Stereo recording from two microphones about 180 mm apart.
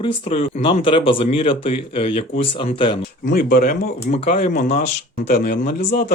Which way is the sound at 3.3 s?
55° left (ahead or behind).